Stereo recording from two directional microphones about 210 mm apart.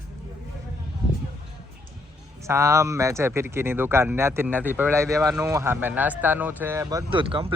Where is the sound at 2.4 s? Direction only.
15° right (ahead or behind).